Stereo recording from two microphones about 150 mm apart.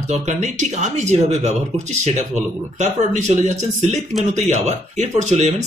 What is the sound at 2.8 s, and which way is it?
Speech, 55° right (ahead or behind).